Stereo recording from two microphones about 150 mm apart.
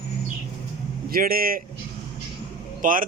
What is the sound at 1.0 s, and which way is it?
Speech, 75° right (ahead or behind).